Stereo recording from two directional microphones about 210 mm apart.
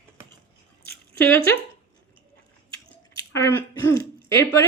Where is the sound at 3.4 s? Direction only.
15° left (ahead or behind).